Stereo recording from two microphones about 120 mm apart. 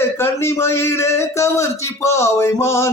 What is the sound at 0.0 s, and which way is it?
Speech, 20° left (ahead or behind).